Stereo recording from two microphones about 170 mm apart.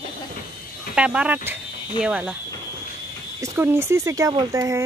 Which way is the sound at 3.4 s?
15° right (ahead or behind).